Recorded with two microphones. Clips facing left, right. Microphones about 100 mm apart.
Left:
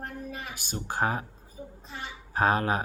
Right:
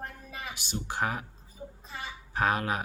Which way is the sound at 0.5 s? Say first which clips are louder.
Even; 45° left (ahead or behind).